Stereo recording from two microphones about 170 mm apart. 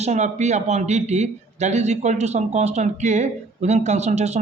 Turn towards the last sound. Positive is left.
turn(degrees=-40)  # may be behind; listen again after turning